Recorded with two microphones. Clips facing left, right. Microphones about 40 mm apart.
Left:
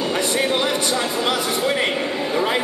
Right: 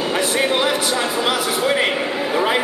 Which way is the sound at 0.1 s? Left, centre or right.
Centre.